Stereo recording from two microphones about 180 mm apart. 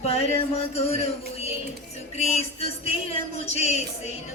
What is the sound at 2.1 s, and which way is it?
Speech, 35° left (ahead or behind).